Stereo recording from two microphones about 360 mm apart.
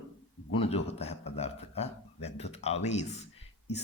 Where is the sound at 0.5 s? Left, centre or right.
Centre.